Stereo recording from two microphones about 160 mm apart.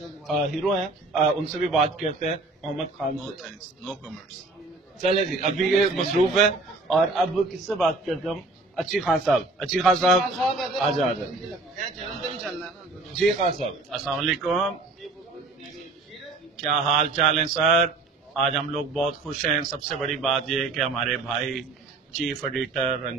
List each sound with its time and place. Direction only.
0.0 s a man's voice: centre (ahead or behind)
5.6 s a man's voice: centre (ahead or behind)
13.4 s a man's voice: 45° right (ahead or behind)
13.8 s a man's voice: centre (ahead or behind)
16.5 s a man's voice: centre (ahead or behind)